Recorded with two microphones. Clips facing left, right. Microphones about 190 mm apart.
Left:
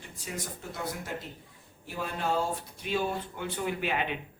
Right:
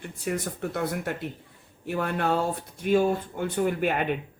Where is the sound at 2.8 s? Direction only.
45° right (ahead or behind).